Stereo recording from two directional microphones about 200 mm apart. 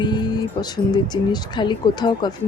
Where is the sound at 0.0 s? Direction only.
20° left (ahead or behind).